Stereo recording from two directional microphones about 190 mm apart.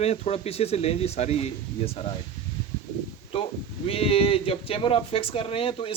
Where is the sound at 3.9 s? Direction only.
30° left (ahead or behind).